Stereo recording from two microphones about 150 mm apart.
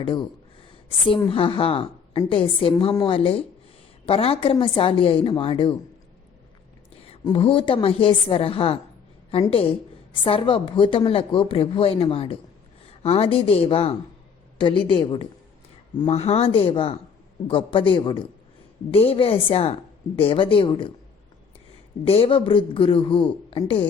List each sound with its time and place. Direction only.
0.0 s speech: 30° left (ahead or behind)
6.9 s a sound: 40° left (ahead or behind)
7.3 s speech: 35° left (ahead or behind)
22.0 s speech: 40° left (ahead or behind)